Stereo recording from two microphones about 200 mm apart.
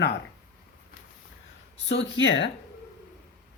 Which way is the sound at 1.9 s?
65° left (ahead or behind).